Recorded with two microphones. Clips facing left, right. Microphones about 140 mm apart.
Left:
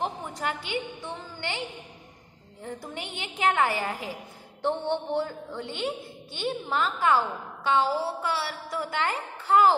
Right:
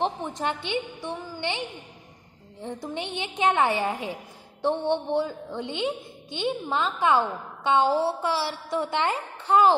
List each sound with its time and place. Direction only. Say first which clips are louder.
0.0 s a woman's voice: right 4 dB; 20° right (ahead or behind)
2.6 s a woman's voice: right 4 dB; 20° right (ahead or behind)